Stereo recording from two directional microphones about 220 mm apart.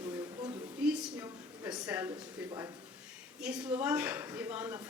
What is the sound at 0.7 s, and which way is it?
A woman's voice, 5° right (ahead or behind).